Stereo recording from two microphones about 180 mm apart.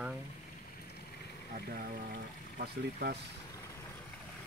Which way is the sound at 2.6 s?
60° right (ahead or behind).